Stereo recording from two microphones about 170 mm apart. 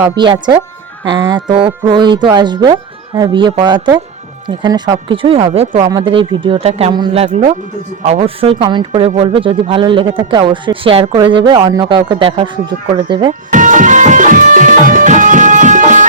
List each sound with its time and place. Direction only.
1.0 s speech: 25° right (ahead or behind)
13.5 s music: 50° right (ahead or behind)